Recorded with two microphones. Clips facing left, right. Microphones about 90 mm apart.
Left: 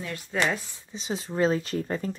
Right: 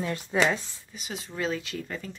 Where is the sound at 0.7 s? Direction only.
30° left (ahead or behind).